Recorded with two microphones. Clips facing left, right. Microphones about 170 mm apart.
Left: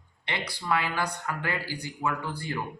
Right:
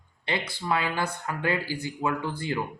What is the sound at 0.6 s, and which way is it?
A man's voice, 25° right (ahead or behind).